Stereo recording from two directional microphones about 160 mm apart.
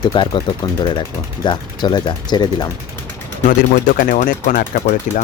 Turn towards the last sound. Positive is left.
turn(degrees=55)  # may be behind; listen again after turning